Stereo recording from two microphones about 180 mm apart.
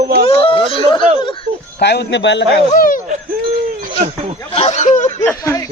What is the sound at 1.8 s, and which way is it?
Speech, 70° left (ahead or behind).